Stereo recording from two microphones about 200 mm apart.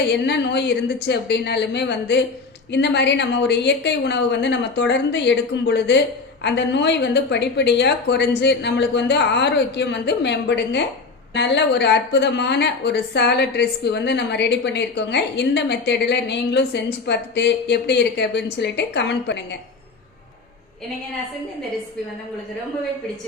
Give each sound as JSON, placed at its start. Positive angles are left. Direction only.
{"t": 0.1, "sound": "a woman's voice", "side_deg": 60}